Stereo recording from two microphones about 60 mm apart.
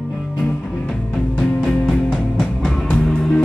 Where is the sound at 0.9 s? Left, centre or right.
Centre.